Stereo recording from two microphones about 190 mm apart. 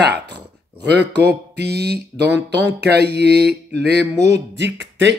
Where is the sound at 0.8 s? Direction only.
60° right (ahead or behind).